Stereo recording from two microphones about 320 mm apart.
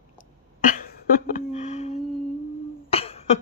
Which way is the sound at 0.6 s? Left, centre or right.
Left.